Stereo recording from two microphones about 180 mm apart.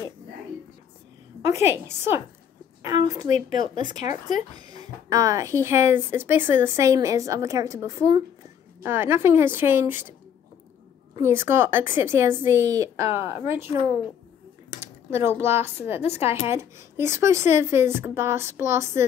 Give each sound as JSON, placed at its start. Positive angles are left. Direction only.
{"t": 1.5, "sound": "a woman's voice", "side_deg": -15}
{"t": 4.6, "sound": "a woman's voice", "side_deg": -20}
{"t": 11.1, "sound": "a woman's voice", "side_deg": -15}
{"t": 14.8, "sound": "a woman's voice", "side_deg": -15}